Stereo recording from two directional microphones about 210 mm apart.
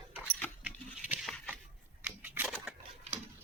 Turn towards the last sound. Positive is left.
turn(degrees=-5)  # may be behind; listen again after turning